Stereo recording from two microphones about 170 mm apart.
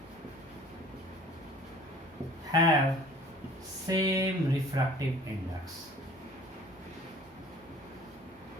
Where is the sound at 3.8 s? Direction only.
20° right (ahead or behind).